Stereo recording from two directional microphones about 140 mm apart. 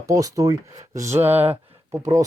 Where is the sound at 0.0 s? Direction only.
25° right (ahead or behind).